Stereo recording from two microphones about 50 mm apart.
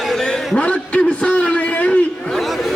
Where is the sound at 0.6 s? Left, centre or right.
Left.